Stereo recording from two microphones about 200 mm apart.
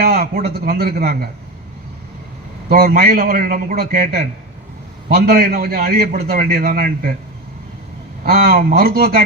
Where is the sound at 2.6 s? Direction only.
50° right (ahead or behind).